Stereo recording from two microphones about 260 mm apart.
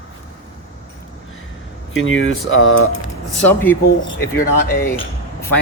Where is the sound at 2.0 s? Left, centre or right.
Left.